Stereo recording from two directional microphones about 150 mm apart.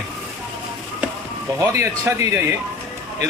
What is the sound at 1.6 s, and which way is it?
Speech, 20° right (ahead or behind).